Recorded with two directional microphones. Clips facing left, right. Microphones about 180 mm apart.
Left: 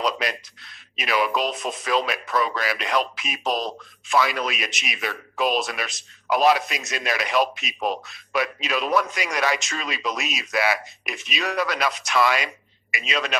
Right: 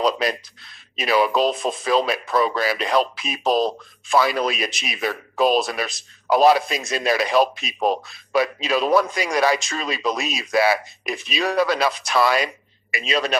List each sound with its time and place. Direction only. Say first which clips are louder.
0.0 s speech: right 5 dB; 35° right (ahead or behind)